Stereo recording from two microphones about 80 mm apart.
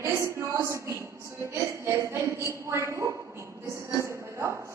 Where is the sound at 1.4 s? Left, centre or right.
Right.